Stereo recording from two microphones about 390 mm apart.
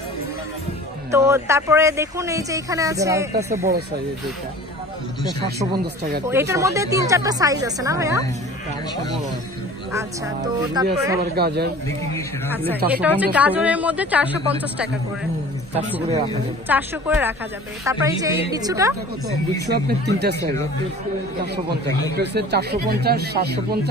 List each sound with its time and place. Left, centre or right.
1.1 s speech: centre
3.5 s speech: centre
6.2 s speech: centre
9.9 s speech: centre
11.3 s speech: right
12.4 s speech: centre
16.6 s speech: centre
19.6 s speech: right
22.1 s speech: right